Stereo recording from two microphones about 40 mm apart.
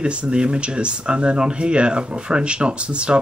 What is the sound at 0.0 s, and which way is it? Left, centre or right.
Speech, right.